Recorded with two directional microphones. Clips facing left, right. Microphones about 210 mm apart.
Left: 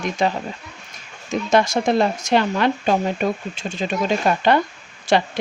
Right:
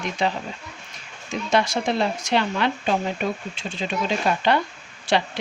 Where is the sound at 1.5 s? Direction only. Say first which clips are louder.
Left 5 dB; 45° left (ahead or behind).